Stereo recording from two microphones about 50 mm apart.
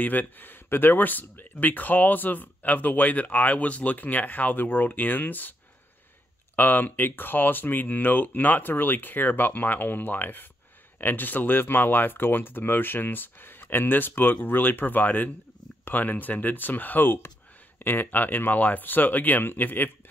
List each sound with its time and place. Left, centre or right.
0.0 s speech: left
6.5 s speech: left